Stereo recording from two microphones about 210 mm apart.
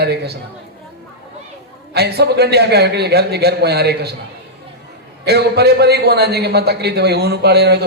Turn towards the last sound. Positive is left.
turn(degrees=-50)  # may be behind; listen again after turning